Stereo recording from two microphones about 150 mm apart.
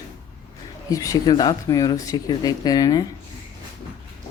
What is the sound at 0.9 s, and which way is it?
Speech, 25° left (ahead or behind).